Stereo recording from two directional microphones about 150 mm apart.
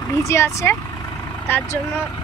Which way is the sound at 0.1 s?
20° left (ahead or behind).